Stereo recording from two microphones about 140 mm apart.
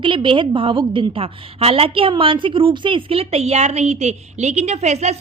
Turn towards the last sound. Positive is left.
turn(degrees=-50)  # may be behind; listen again after turning